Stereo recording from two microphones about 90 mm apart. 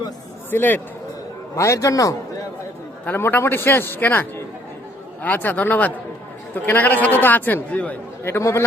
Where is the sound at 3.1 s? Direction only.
20° left (ahead or behind).